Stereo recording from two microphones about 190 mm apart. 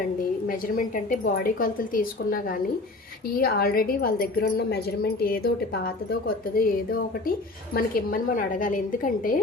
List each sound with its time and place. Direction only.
0.4 s a woman's voice: 45° left (ahead or behind)